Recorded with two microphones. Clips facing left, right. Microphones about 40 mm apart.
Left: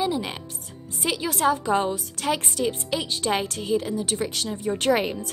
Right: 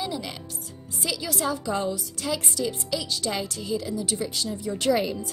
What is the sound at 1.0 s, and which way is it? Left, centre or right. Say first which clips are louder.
A woman's voice: left 5 dB; left.